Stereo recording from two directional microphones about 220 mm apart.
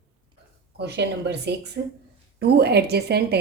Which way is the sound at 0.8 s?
50° right (ahead or behind).